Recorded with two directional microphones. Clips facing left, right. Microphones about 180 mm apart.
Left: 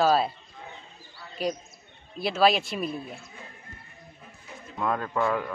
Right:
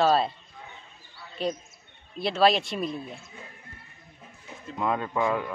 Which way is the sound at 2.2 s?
Centre (ahead or behind).